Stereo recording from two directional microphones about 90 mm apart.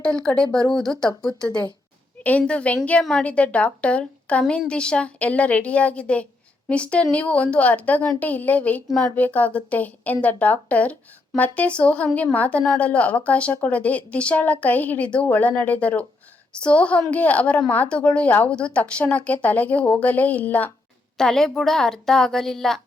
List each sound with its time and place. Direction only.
0.0 s a woman's voice: 10° left (ahead or behind)
21.2 s a woman's voice: 5° left (ahead or behind)